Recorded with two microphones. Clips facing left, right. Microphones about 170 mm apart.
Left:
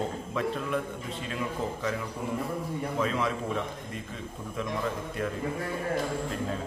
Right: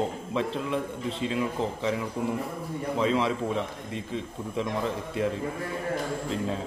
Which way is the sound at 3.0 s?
25° right (ahead or behind).